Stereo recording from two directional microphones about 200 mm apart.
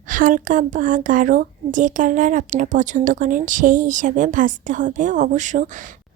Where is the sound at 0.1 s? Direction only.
40° right (ahead or behind).